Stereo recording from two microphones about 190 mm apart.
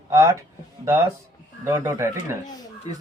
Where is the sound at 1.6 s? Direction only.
15° right (ahead or behind).